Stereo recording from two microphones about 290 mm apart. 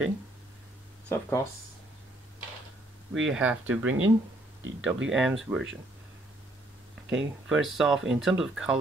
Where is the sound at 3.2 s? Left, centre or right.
Centre.